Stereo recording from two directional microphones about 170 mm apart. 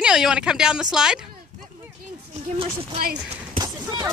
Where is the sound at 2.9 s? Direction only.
60° right (ahead or behind).